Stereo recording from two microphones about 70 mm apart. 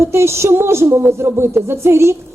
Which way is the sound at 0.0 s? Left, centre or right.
Right.